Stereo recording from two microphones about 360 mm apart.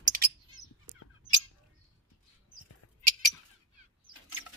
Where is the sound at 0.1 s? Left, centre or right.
Right.